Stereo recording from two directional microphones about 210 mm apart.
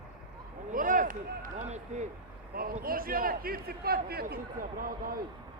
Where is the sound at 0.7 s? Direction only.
40° right (ahead or behind).